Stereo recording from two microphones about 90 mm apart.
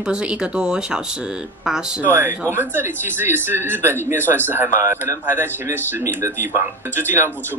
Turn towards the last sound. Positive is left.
turn(degrees=-25)  # may be behind; listen again after turning